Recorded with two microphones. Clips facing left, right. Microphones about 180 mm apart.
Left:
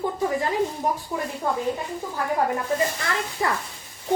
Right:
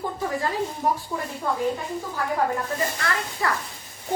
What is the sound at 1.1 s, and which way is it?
Speech, 15° left (ahead or behind).